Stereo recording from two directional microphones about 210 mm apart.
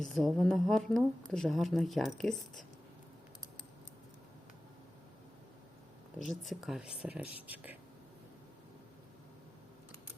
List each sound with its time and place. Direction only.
0.1 s speech: centre (ahead or behind)
6.1 s speech: centre (ahead or behind)